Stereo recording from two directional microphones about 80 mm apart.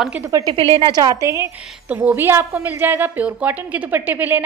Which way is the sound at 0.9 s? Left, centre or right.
Right.